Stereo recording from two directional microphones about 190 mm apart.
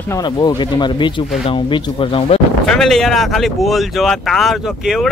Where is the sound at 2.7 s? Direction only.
5° left (ahead or behind).